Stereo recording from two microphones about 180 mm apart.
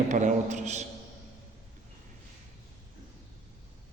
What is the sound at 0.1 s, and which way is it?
Speech, 40° right (ahead or behind).